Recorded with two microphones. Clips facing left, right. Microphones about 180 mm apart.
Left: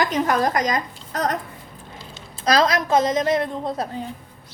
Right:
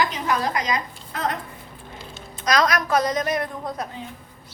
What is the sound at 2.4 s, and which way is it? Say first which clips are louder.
A woman's voice: left 2 dB; 30° left (ahead or behind).